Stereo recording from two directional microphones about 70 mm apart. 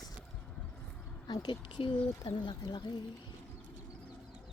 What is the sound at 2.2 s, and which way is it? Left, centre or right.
Speech, left.